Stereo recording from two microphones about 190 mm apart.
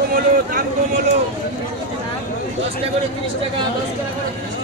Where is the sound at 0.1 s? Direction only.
50° right (ahead or behind).